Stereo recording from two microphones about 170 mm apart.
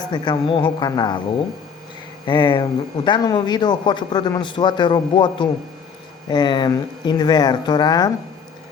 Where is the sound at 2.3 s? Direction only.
25° left (ahead or behind).